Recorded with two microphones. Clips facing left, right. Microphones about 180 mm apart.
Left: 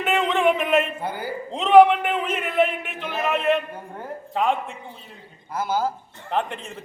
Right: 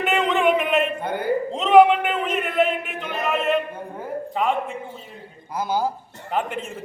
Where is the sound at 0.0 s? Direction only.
Centre (ahead or behind).